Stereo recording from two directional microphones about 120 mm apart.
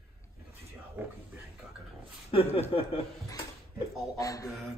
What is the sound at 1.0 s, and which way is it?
Speech, 15° right (ahead or behind).